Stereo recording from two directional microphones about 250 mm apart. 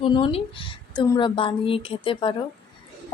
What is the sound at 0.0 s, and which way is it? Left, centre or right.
A woman's voice, left.